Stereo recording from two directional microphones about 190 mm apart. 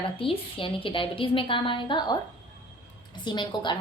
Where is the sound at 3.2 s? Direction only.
25° left (ahead or behind).